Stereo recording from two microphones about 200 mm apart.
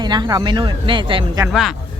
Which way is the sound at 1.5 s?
Centre (ahead or behind).